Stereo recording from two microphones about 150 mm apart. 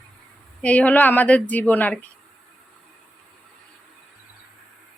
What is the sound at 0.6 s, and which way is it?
A woman's voice, 10° left (ahead or behind).